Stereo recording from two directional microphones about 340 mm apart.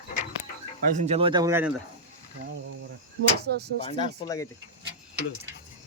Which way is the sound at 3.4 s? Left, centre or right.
Right.